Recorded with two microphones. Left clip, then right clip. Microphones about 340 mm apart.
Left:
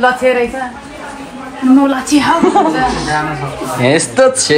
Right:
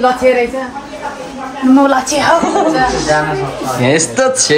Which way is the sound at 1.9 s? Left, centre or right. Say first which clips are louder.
Right 1 dB; right.